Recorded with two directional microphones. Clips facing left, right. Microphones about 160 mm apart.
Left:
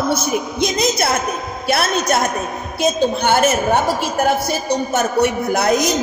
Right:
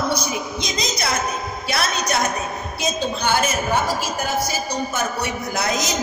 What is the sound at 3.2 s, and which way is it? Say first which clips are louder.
A man's voice: left 5 dB; 55° left (ahead or behind).